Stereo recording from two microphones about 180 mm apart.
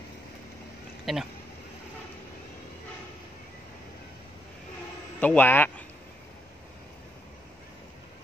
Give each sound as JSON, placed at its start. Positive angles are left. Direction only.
{"t": 1.1, "sound": "speech", "side_deg": 0}
{"t": 5.2, "sound": "speech", "side_deg": 10}